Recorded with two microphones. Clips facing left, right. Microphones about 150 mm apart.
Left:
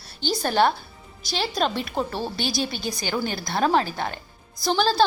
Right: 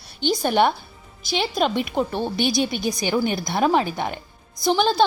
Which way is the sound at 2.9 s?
20° right (ahead or behind).